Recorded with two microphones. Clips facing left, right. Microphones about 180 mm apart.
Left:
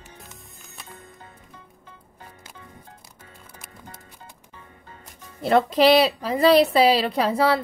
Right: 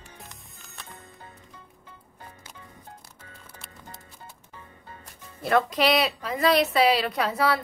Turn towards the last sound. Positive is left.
turn(degrees=30)  # may be behind; listen again after turning